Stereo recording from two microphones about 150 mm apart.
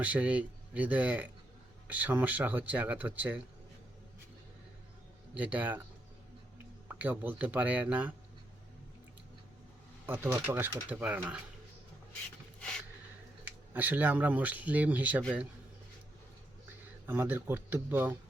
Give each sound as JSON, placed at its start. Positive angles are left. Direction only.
{"t": 0.0, "sound": "speech", "side_deg": -10}
{"t": 5.3, "sound": "speech", "side_deg": -10}
{"t": 6.8, "sound": "speech", "side_deg": -10}
{"t": 10.1, "sound": "speech", "side_deg": -15}
{"t": 13.4, "sound": "speech", "side_deg": -10}
{"t": 17.1, "sound": "speech", "side_deg": -15}